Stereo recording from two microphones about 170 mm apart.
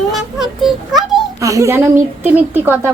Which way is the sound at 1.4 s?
20° right (ahead or behind).